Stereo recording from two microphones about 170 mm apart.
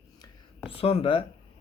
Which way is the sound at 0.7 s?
35° left (ahead or behind).